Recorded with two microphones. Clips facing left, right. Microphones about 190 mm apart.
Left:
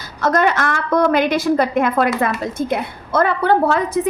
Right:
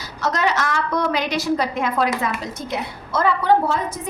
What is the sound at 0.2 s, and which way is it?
A woman's voice, 55° left (ahead or behind).